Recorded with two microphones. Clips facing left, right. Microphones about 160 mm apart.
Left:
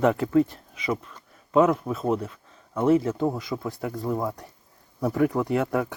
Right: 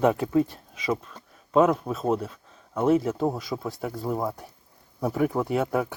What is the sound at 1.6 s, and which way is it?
Speech, 10° right (ahead or behind).